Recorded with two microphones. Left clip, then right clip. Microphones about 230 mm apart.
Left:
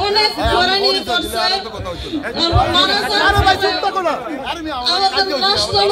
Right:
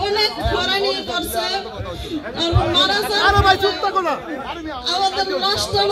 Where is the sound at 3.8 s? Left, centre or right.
Centre.